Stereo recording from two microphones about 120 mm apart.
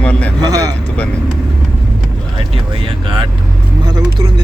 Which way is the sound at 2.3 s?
50° right (ahead or behind).